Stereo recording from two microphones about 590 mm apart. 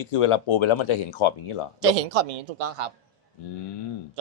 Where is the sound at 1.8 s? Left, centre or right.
Right.